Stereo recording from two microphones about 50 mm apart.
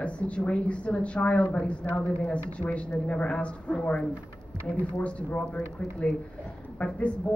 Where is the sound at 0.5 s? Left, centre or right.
Left.